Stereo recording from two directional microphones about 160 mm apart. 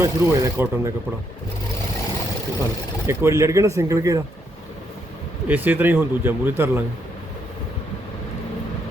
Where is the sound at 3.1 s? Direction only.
15° right (ahead or behind).